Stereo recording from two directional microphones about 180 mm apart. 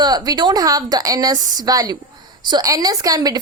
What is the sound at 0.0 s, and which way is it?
A woman's voice, 25° right (ahead or behind).